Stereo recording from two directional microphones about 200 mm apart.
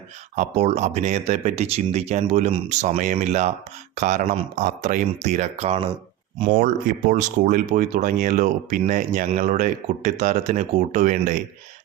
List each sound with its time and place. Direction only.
0.3 s speech: 35° right (ahead or behind)
6.4 s speech: 45° right (ahead or behind)